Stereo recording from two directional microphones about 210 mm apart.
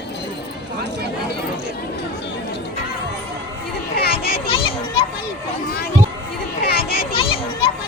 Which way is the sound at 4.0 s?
45° left (ahead or behind).